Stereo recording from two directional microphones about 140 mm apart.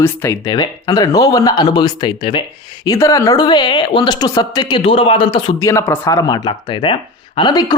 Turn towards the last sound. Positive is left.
turn(degrees=30)  # may be behind; listen again after turning